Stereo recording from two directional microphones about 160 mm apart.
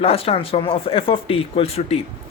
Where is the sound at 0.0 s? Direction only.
35° left (ahead or behind).